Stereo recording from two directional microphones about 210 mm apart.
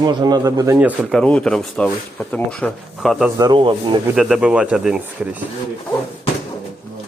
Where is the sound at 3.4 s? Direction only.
20° right (ahead or behind).